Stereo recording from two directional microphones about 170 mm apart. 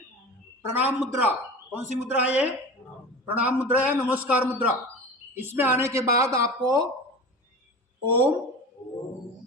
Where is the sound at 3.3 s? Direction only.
10° right (ahead or behind).